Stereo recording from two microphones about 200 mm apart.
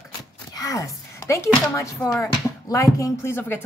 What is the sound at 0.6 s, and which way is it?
A woman's voice, 15° left (ahead or behind).